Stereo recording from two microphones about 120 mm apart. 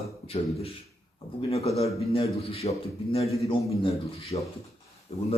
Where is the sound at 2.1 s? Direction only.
55° left (ahead or behind).